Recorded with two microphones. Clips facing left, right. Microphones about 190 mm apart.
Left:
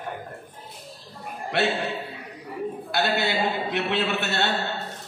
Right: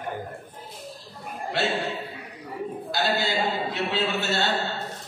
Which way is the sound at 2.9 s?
65° left (ahead or behind).